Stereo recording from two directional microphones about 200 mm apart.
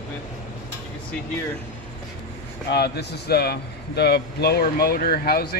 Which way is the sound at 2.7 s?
55° left (ahead or behind).